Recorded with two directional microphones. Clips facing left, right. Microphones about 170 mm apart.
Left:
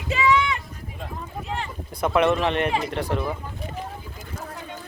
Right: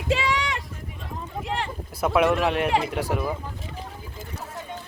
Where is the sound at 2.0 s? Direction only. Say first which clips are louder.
Even; 5° right (ahead or behind).